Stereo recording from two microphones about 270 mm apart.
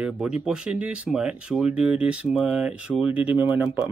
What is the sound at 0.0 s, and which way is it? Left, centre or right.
Speech, centre.